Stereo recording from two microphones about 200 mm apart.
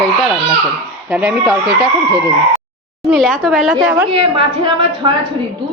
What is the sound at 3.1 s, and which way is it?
Speech, centre (ahead or behind).